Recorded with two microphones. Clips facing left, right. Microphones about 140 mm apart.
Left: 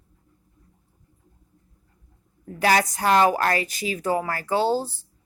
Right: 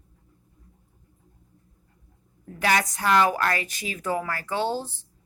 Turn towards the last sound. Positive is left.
turn(degrees=35)  # may be behind; listen again after turning